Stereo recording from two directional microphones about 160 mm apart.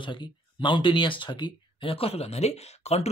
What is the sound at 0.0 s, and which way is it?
Speech, 30° left (ahead or behind).